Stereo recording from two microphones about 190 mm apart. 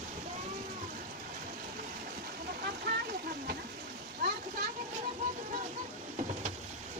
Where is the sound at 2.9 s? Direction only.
55° right (ahead or behind).